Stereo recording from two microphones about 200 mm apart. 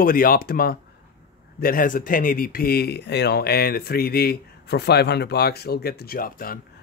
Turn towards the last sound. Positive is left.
turn(degrees=45)  # may be behind; listen again after turning